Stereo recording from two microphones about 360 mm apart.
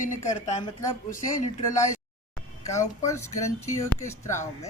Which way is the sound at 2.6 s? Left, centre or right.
Centre.